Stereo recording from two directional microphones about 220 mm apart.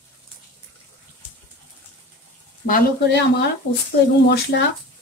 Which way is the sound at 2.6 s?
45° left (ahead or behind).